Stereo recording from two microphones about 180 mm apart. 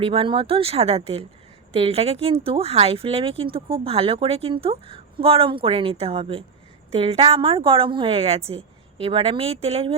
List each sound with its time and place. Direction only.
0.0 s speech: 30° right (ahead or behind)